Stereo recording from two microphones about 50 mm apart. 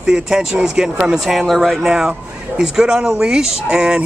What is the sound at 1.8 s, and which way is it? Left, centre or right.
Speech, centre.